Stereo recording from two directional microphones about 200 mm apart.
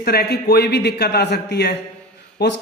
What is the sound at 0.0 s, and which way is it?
Speech, 50° left (ahead or behind).